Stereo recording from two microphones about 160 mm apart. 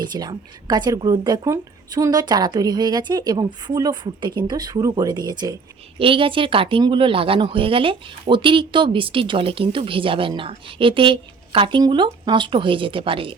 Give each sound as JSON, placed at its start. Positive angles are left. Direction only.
{"t": 0.0, "sound": "speech", "side_deg": -25}